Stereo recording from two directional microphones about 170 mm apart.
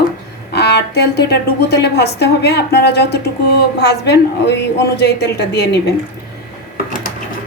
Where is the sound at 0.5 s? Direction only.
75° left (ahead or behind).